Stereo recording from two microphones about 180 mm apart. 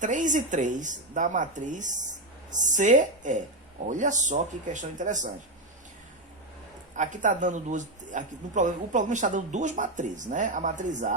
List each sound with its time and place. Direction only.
0.0 s a man's voice: 45° right (ahead or behind)
6.9 s a man's voice: 45° right (ahead or behind)